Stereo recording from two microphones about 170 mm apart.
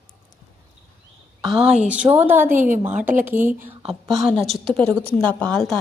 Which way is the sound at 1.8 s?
5° right (ahead or behind).